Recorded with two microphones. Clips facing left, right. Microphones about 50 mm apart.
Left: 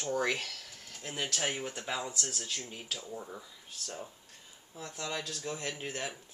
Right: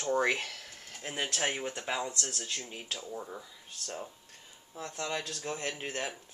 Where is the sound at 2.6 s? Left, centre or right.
Centre.